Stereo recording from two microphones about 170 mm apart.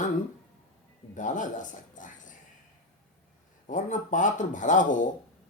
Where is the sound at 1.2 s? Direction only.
50° left (ahead or behind).